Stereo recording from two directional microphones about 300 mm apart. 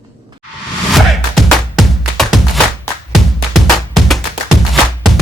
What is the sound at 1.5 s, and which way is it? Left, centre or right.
Music, centre.